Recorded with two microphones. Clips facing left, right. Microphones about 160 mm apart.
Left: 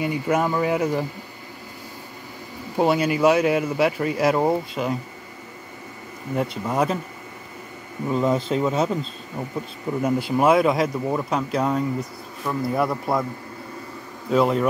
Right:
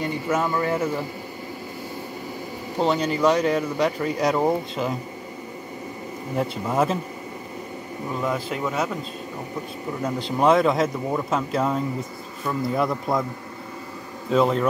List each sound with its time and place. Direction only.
0.0 s speech: 10° left (ahead or behind)
2.8 s speech: 10° left (ahead or behind)
6.3 s speech: centre (ahead or behind)
8.2 s speech: 25° left (ahead or behind)
10.0 s speech: 10° left (ahead or behind)
14.3 s speech: 5° left (ahead or behind)